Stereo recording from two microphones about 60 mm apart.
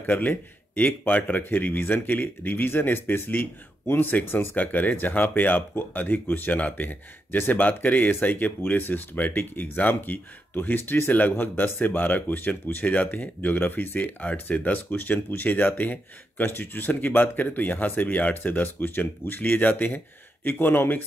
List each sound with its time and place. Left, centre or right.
0.0 s speech: left